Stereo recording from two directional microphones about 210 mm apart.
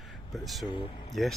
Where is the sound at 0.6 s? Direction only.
25° left (ahead or behind).